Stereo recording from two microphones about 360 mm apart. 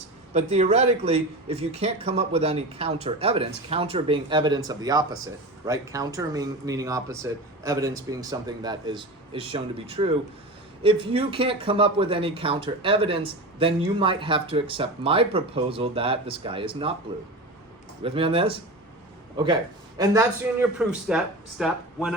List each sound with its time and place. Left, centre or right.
0.3 s speech: centre
10.8 s speech: centre
18.0 s speech: centre
20.0 s a man's voice: centre